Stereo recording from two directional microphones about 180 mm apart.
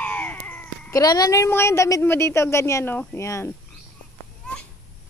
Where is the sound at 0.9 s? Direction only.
20° left (ahead or behind).